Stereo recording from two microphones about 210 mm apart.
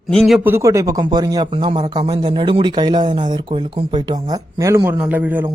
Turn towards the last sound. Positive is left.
turn(degrees=-10)  # may be behind; listen again after turning